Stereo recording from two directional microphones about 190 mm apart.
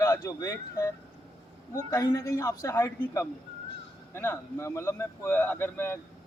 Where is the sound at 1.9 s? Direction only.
15° left (ahead or behind).